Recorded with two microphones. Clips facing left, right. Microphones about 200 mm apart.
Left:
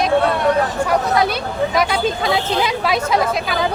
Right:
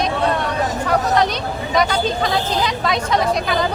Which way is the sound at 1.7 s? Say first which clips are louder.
Right 3 dB; 5° left (ahead or behind).